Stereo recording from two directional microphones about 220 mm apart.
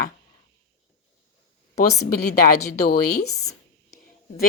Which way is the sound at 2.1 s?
45° left (ahead or behind).